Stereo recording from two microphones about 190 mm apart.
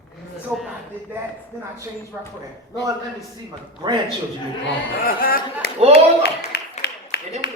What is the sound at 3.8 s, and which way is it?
Speech, 25° right (ahead or behind).